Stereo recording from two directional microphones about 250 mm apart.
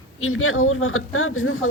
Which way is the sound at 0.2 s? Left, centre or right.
Left.